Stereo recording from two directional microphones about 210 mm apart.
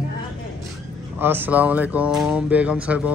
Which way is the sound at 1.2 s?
10° right (ahead or behind).